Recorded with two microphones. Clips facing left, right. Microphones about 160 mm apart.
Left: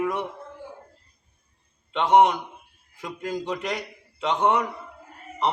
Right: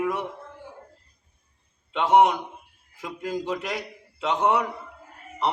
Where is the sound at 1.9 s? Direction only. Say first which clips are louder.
Left 1 dB; 5° right (ahead or behind).